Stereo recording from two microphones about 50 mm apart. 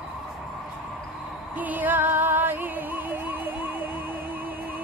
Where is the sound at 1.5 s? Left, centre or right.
Right.